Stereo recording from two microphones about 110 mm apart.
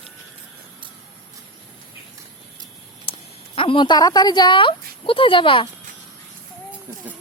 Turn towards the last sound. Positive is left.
turn(degrees=50)  # may be behind; listen again after turning